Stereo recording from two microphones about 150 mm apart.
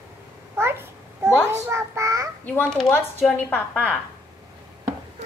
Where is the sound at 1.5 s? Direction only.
15° right (ahead or behind).